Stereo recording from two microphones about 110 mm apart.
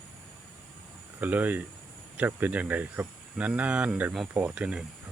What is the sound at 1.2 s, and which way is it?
Speech, 15° right (ahead or behind).